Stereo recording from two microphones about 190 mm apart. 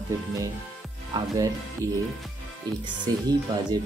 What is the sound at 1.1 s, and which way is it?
Speech, 20° right (ahead or behind).